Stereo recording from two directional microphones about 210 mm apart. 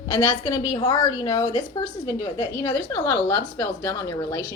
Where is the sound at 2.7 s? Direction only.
10° left (ahead or behind).